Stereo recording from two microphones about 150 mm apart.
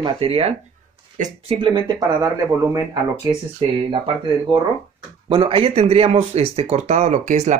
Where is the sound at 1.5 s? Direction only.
30° right (ahead or behind).